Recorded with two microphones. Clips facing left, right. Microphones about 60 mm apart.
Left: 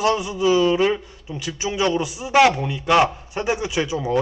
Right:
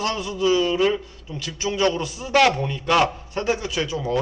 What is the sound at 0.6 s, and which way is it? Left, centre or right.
Speech, left.